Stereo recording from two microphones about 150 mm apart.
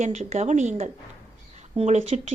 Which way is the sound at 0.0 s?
50° right (ahead or behind).